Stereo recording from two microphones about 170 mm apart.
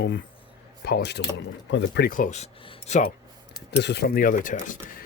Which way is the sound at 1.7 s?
85° left.